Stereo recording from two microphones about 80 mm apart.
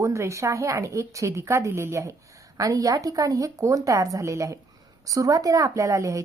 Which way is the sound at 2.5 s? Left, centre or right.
Right.